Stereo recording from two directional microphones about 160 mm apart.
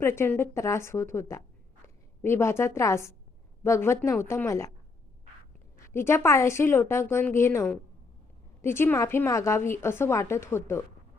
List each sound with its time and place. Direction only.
0.0 s a woman's voice: 15° left (ahead or behind)
5.7 s a woman's voice: 15° left (ahead or behind)